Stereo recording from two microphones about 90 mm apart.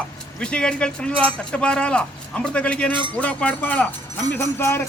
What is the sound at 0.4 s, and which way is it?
Speech, 10° left (ahead or behind).